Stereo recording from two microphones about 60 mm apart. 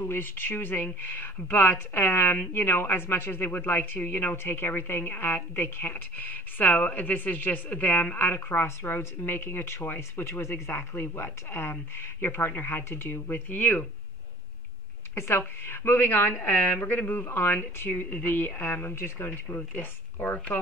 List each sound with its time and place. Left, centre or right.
0.0 s speech: left
15.1 s speech: left
16.3 s speech: left